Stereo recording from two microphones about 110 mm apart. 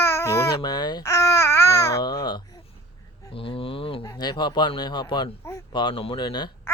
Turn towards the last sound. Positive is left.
turn(degrees=40)  # may be behind; listen again after turning